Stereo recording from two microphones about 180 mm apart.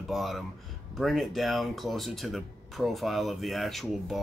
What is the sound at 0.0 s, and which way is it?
Speech, centre (ahead or behind).